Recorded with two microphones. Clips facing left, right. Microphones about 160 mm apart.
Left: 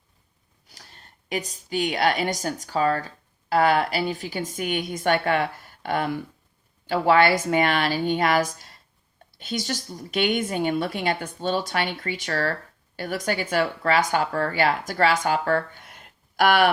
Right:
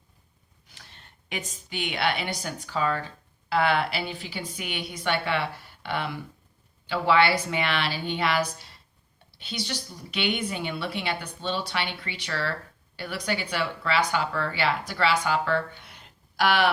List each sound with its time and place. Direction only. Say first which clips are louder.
0.7 s a woman's voice: left 2 dB; 40° left (ahead or behind)